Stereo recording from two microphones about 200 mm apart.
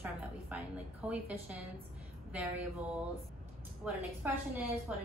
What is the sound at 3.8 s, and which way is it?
A woman's voice, 5° right (ahead or behind).